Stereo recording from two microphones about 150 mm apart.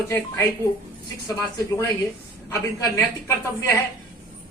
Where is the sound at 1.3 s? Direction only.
20° left (ahead or behind).